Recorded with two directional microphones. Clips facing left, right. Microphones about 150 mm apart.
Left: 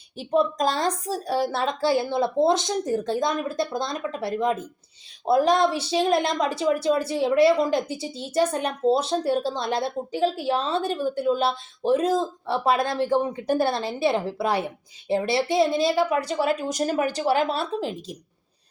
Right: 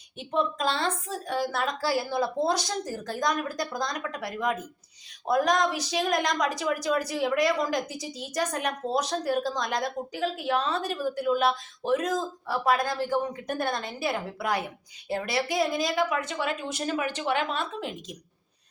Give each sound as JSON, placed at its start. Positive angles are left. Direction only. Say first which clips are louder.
{"t": 0.2, "sound": "speech", "louder": "left 6 dB", "side_deg": 35}